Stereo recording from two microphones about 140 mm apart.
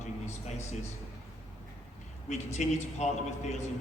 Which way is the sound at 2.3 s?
55° left (ahead or behind).